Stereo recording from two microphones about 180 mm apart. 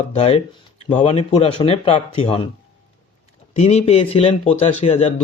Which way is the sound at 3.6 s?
35° left (ahead or behind).